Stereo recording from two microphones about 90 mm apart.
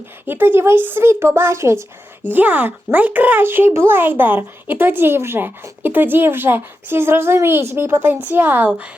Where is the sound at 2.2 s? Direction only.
20° right (ahead or behind).